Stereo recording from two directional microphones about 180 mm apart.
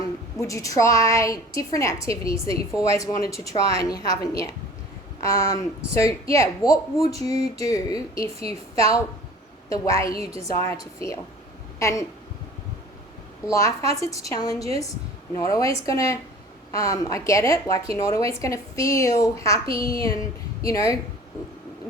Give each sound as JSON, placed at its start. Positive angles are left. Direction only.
{"t": 0.3, "sound": "a woman's voice", "side_deg": 15}
{"t": 13.5, "sound": "a woman's voice", "side_deg": 15}